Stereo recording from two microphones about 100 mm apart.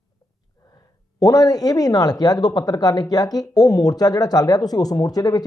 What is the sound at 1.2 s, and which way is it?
Speech, 40° left (ahead or behind).